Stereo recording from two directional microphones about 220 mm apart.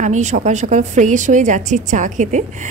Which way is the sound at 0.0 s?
35° right (ahead or behind).